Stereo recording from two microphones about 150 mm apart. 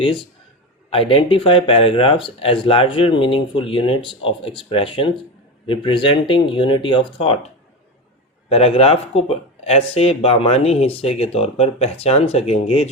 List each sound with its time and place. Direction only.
0.0 s speech: 35° left (ahead or behind)